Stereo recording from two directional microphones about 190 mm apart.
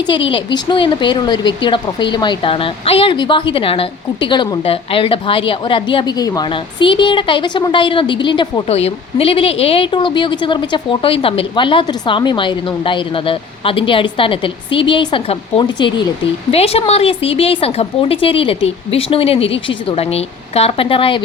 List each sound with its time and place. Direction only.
0.1 s speech: 25° left (ahead or behind)